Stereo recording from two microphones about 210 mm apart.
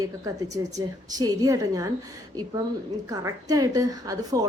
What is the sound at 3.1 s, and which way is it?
A woman's voice, 15° right (ahead or behind).